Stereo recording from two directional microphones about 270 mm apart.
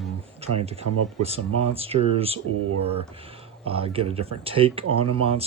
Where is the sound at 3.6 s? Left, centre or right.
Right.